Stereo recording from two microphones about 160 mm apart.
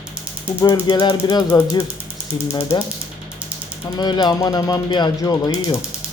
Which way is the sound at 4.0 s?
30° left (ahead or behind).